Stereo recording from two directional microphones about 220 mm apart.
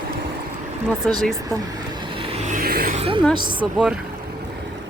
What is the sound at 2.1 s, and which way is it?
Vehicle, 30° right (ahead or behind).